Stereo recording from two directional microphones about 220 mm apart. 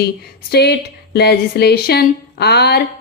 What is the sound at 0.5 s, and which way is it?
Speech, 45° left (ahead or behind).